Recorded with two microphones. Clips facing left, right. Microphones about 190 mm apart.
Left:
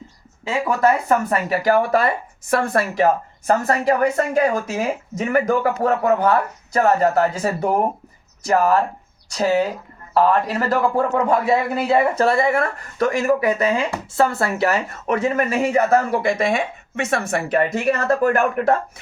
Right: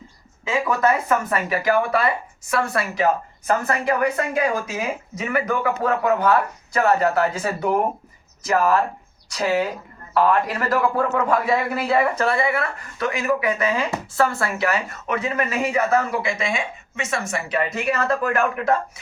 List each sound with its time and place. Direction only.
0.8 s speech: 35° left (ahead or behind)
12.2 s speech: 40° left (ahead or behind)
13.5 s speech: 30° left (ahead or behind); by 18.8 s 45° left (ahead or behind)